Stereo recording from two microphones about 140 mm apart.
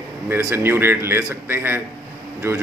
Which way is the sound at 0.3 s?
20° right (ahead or behind).